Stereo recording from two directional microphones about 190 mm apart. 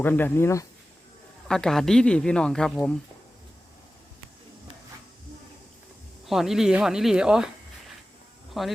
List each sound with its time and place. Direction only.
0.0 s speech: 10° left (ahead or behind)
1.5 s speech: 5° left (ahead or behind)
6.2 s speech: centre (ahead or behind)
8.6 s speech: centre (ahead or behind)